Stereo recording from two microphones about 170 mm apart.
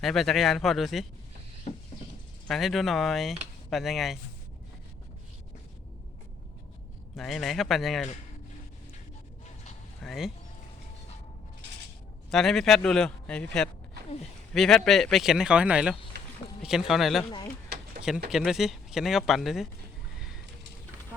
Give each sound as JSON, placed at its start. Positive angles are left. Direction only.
{"t": 0.0, "sound": "speech", "side_deg": 0}
{"t": 1.7, "sound": "patter", "side_deg": 40}
{"t": 2.5, "sound": "speech", "side_deg": 0}
{"t": 7.2, "sound": "speech", "side_deg": 0}
{"t": 10.0, "sound": "speech", "side_deg": 0}
{"t": 12.3, "sound": "speech", "side_deg": 0}
{"t": 18.3, "sound": "speech", "side_deg": 0}
{"t": 20.1, "sound": "a sound", "side_deg": 0}